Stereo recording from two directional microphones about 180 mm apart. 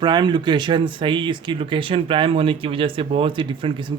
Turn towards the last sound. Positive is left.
turn(degrees=-30)  # may be behind; listen again after turning